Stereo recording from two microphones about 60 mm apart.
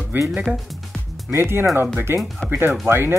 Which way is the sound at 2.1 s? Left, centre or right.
Right.